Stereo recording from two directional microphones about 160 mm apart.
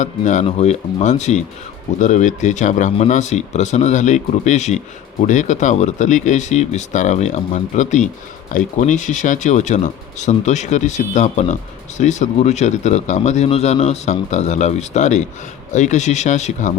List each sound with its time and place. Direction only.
0.0 s a man's voice: 50° left (ahead or behind)